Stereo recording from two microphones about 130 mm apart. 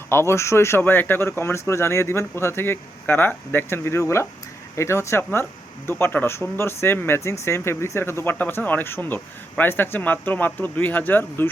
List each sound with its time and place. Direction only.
0.1 s speech: 20° left (ahead or behind)